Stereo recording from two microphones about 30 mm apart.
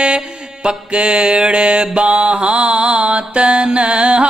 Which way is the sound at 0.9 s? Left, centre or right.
Right.